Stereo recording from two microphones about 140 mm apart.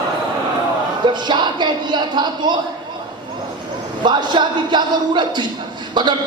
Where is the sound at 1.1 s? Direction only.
30° right (ahead or behind).